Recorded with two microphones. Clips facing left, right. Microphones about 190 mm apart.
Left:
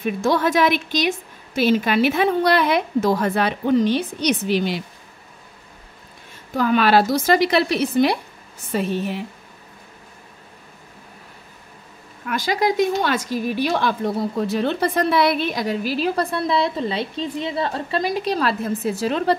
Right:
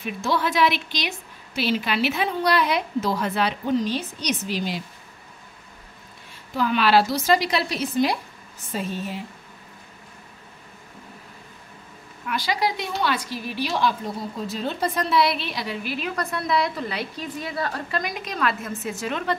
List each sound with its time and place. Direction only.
0.0 s a woman's voice: 50° left (ahead or behind); by 4.8 s 65° left (ahead or behind)
6.5 s a woman's voice: 45° left (ahead or behind); by 9.2 s 65° left (ahead or behind)
12.3 s a woman's voice: 50° left (ahead or behind)